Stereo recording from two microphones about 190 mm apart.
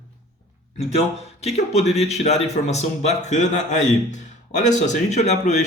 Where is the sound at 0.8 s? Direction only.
35° left (ahead or behind).